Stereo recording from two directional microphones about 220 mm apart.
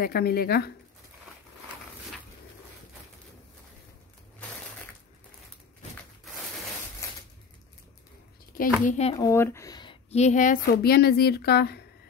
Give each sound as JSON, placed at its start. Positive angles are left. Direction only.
{"t": 0.0, "sound": "speech", "side_deg": 45}
{"t": 8.8, "sound": "speech", "side_deg": 30}
{"t": 9.2, "sound": "speech", "side_deg": 10}